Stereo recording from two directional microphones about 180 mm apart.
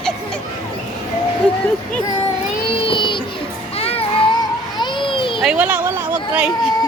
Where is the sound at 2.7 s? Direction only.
30° left (ahead or behind).